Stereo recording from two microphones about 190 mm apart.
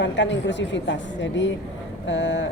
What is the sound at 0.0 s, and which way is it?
A woman's voice, 70° left (ahead or behind).